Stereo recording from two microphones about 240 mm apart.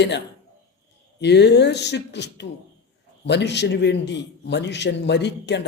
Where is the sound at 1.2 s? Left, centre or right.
Left.